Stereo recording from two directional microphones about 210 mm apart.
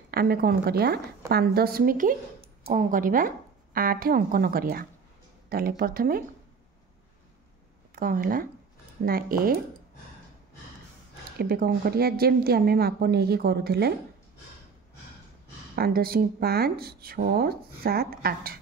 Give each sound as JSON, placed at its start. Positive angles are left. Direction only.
{"t": 0.1, "sound": "speech", "side_deg": -45}
{"t": 2.4, "sound": "a sound", "side_deg": -25}
{"t": 2.9, "sound": "speech", "side_deg": -40}
{"t": 7.9, "sound": "speech", "side_deg": -40}
{"t": 11.3, "sound": "speech", "side_deg": -45}
{"t": 15.7, "sound": "speech", "side_deg": -45}